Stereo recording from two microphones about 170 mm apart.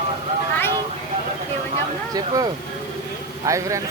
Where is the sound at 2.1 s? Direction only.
20° right (ahead or behind).